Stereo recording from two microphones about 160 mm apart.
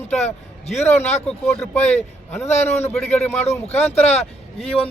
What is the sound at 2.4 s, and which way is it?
Speech, 45° left (ahead or behind).